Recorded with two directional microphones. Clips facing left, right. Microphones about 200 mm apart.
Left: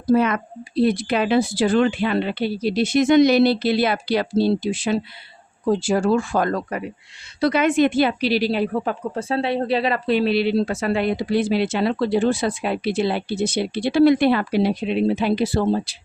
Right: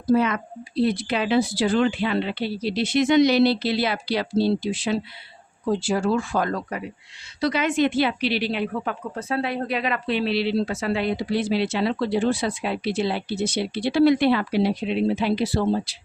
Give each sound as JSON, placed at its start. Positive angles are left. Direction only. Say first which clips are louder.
{"t": 0.1, "sound": "speech", "louder": "left 2 dB", "side_deg": 55}